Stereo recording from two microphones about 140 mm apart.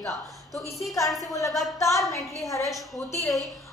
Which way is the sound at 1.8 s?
20° left (ahead or behind).